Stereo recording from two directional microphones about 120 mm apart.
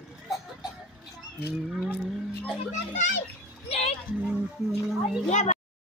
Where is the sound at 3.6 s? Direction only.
60° left (ahead or behind).